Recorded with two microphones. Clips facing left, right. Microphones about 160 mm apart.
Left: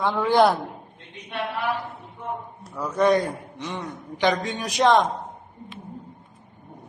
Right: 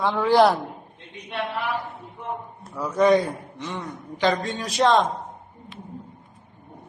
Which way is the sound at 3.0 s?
10° right (ahead or behind).